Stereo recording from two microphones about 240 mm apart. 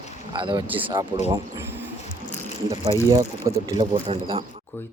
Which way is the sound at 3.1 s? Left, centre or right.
Centre.